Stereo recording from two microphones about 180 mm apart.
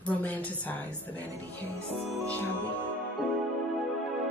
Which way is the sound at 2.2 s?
10° left (ahead or behind).